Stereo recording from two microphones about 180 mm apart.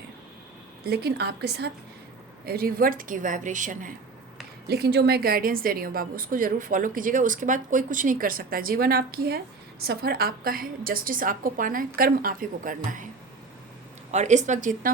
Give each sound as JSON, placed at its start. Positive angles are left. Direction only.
{"t": 0.9, "sound": "a woman's voice", "side_deg": -60}
{"t": 4.7, "sound": "a woman's voice", "side_deg": -65}
{"t": 14.1, "sound": "speech", "side_deg": -40}